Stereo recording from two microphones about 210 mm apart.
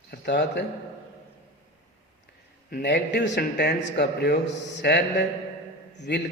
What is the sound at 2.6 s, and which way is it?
A man's voice, 50° left (ahead or behind).